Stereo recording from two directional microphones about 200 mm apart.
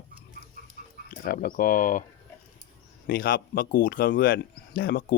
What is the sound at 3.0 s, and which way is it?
Speech, 45° left (ahead or behind).